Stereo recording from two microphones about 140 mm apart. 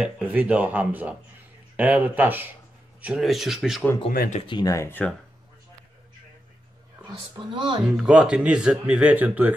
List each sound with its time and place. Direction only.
0.0 s speech: 10° right (ahead or behind)
4.1 s speech: 90° left
4.4 s speech: 35° left (ahead or behind)
4.6 s speech: 20° left (ahead or behind)
7.3 s speech: 35° right (ahead or behind)
7.8 s speech: 5° right (ahead or behind)